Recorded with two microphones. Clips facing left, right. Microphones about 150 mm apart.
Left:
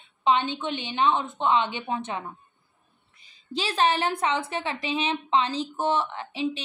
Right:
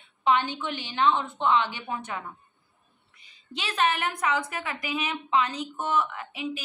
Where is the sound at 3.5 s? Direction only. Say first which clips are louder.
Left 3 dB; 30° left (ahead or behind).